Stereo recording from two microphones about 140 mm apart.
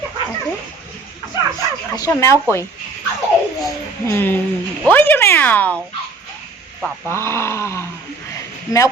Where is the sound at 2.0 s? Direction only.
20° left (ahead or behind).